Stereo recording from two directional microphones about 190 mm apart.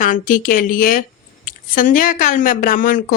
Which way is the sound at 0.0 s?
45° left (ahead or behind).